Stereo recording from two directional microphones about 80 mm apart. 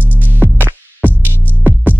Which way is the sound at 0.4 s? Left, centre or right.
Right.